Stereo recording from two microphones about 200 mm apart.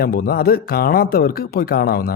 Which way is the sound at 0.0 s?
50° left (ahead or behind).